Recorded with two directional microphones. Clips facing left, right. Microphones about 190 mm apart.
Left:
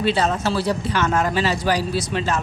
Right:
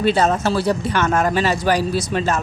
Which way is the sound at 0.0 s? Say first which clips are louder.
Right 3 dB; 45° right (ahead or behind).